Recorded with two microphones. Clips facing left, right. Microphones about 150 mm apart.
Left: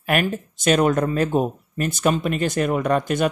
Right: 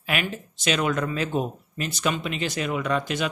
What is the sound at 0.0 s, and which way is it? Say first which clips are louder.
Speech: left 7 dB; 50° left (ahead or behind).